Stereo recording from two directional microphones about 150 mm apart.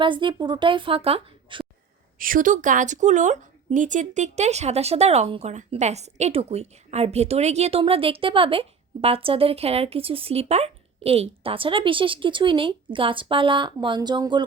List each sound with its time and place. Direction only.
0.0 s speech: 30° right (ahead or behind)
2.1 s speech: 70° right (ahead or behind); by 14.4 s 30° right (ahead or behind)